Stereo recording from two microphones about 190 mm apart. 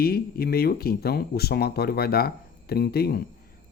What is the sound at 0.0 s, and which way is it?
Speech, 55° left (ahead or behind).